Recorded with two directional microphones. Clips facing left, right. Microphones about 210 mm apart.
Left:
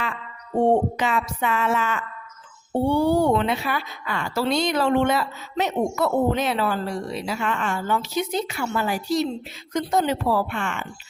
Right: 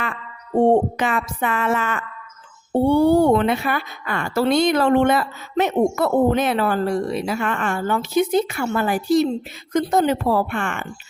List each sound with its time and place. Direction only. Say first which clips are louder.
0.9 s a woman's voice: right 2 dB; 50° right (ahead or behind)